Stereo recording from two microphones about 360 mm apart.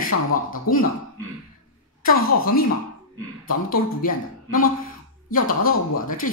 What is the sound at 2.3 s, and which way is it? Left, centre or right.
Speech, left.